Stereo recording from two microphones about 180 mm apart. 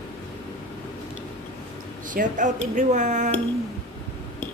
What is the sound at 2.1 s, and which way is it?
Speech, 45° right (ahead or behind).